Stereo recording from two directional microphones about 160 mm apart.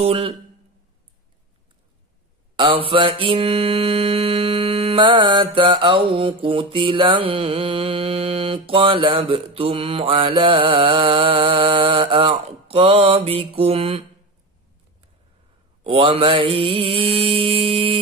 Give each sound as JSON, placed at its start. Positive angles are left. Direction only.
{"t": 0.0, "sound": "mantra", "side_deg": -35}
{"t": 2.5, "sound": "mantra", "side_deg": -30}
{"t": 15.8, "sound": "mantra", "side_deg": -35}